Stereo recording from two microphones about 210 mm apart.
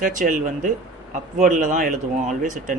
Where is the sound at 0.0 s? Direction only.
40° right (ahead or behind).